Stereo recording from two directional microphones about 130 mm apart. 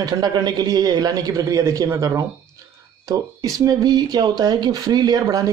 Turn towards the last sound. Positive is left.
turn(degrees=-30)  # may be behind; listen again after turning